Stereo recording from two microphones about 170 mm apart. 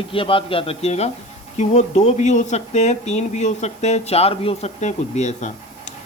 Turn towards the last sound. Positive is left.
turn(degrees=40)  # may be behind; listen again after turning